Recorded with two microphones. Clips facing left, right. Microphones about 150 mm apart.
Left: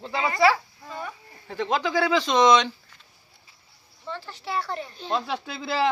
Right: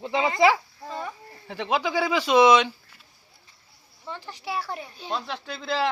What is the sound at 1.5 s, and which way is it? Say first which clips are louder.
Speech: left 1 dB; 5° right (ahead or behind).